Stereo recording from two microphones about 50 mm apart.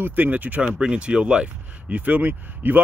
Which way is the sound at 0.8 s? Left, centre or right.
Right.